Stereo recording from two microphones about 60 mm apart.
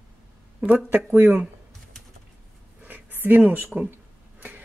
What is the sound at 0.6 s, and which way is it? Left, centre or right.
Speech, right.